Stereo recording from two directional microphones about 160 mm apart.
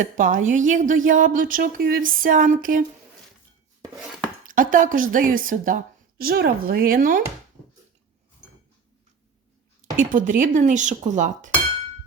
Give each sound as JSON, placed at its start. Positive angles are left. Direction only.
{"t": 0.0, "sound": "a woman's voice", "side_deg": -55}
{"t": 4.4, "sound": "a woman's voice", "side_deg": -60}
{"t": 10.0, "sound": "speech", "side_deg": -55}